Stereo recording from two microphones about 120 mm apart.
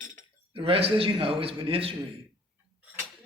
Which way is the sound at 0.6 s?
50° right (ahead or behind).